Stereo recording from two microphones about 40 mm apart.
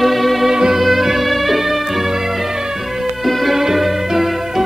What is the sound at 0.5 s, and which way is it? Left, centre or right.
Music, centre.